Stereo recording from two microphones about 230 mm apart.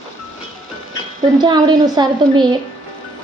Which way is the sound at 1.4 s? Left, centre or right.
Centre.